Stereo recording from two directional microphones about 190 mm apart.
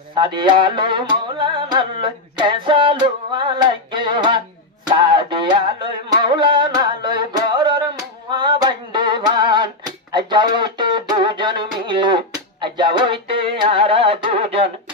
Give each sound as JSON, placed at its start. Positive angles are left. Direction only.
{"t": 0.1, "sound": "music", "side_deg": -25}